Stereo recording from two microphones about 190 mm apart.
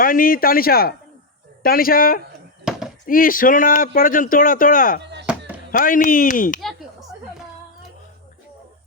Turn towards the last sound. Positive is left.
turn(degrees=0)  # may be behind; listen again after turning